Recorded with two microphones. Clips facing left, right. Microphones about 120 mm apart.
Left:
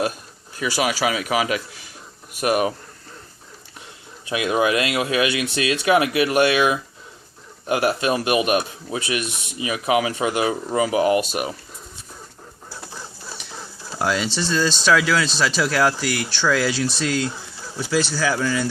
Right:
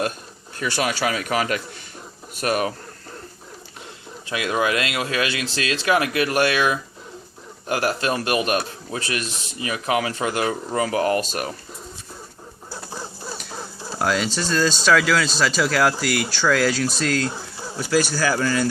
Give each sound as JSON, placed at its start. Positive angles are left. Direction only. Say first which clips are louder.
{"t": 0.5, "sound": "a man's voice", "louder": "left 1 dB", "side_deg": 5}
{"t": 4.3, "sound": "a man's voice", "louder": "left 2 dB", "side_deg": 20}
{"t": 13.3, "sound": "chicken", "louder": "right 3 dB", "side_deg": -5}
{"t": 14.8, "sound": "speech", "louder": "even", "side_deg": 0}